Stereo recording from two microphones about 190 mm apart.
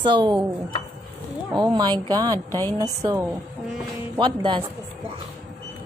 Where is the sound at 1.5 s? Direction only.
20° right (ahead or behind).